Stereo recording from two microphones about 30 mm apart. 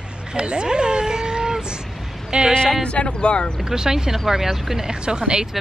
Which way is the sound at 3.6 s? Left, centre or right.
Right.